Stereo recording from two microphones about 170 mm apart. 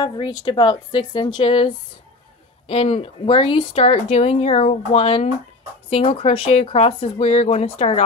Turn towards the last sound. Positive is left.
turn(degrees=35)  # may be behind; listen again after turning